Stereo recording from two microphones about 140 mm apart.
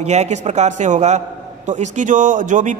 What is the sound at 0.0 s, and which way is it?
A man's voice, 55° right (ahead or behind).